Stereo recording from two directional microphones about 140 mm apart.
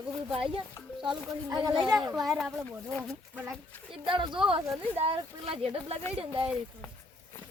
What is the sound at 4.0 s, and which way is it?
Speech, 35° right (ahead or behind).